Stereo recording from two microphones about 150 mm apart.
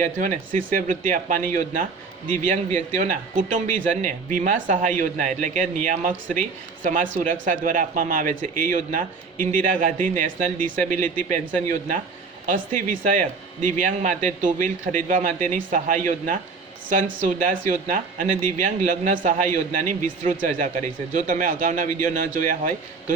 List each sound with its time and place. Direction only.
0.0 s speech: 55° right (ahead or behind)
12.5 s speech: 60° right (ahead or behind)